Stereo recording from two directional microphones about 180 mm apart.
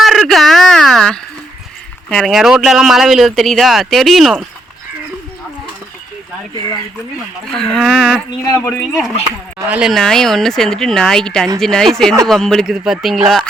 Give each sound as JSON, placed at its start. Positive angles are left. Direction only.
{"t": 0.0, "sound": "a sound", "side_deg": 0}
{"t": 2.0, "sound": "speech", "side_deg": 0}
{"t": 7.5, "sound": "speech", "side_deg": 5}
{"t": 8.4, "sound": "speech", "side_deg": 15}
{"t": 8.8, "sound": "speech", "side_deg": 0}